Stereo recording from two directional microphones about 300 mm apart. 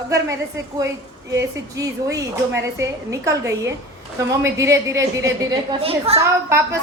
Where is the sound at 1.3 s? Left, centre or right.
Centre.